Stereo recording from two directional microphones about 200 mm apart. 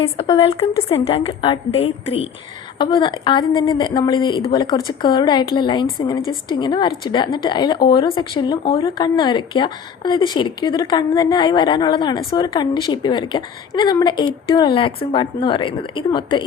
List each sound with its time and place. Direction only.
0.0 s a woman's voice: 25° left (ahead or behind)